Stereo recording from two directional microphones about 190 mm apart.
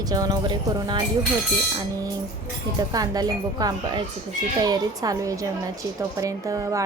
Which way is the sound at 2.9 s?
20° right (ahead or behind).